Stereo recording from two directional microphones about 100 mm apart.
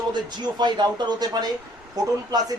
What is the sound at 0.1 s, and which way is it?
Speech, 45° right (ahead or behind).